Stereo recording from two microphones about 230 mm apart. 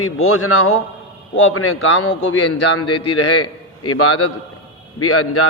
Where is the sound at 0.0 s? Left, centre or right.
Left.